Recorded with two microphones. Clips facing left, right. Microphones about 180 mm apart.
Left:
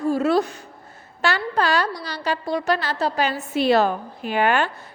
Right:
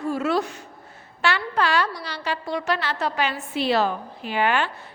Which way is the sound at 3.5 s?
45° left (ahead or behind).